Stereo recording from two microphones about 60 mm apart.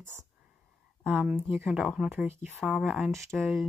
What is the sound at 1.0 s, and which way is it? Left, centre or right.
Speech, right.